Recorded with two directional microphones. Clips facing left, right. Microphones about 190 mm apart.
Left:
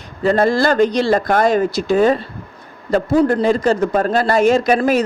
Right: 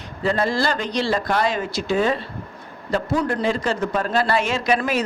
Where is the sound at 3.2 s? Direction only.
35° left (ahead or behind).